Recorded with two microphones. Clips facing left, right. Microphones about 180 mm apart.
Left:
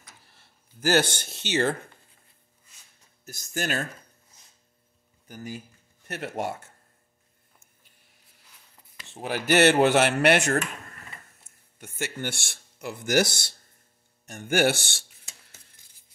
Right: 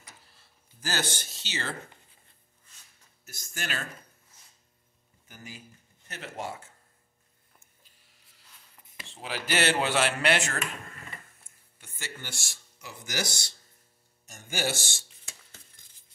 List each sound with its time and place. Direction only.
0.3 s speech: 65° left (ahead or behind)
3.3 s speech: 40° left (ahead or behind)
5.3 s speech: 45° left (ahead or behind)
6.0 s speech: 60° left (ahead or behind)
9.2 s speech: 50° left (ahead or behind)
11.8 s speech: 55° left (ahead or behind)